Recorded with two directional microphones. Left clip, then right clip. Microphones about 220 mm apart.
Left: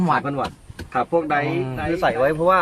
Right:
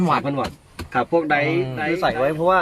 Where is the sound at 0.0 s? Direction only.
15° left (ahead or behind).